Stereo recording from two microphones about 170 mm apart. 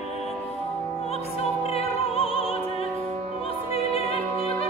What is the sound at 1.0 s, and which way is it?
Opera, 35° left (ahead or behind).